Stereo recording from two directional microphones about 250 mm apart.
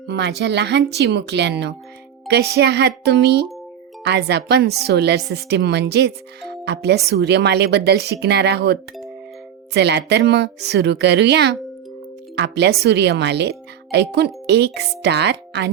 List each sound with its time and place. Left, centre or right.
0.1 s speech: right